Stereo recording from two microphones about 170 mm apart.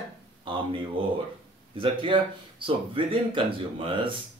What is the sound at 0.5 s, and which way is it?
Speech, 30° right (ahead or behind).